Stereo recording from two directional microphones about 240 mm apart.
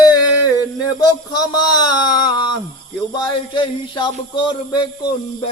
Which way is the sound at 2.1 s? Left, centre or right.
Centre.